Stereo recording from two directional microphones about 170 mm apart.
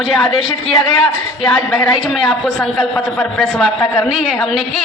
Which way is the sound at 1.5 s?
5° left (ahead or behind).